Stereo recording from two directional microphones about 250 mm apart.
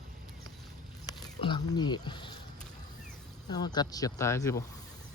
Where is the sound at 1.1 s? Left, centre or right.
Centre.